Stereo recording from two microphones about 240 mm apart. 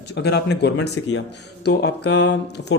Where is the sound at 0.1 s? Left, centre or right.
Left.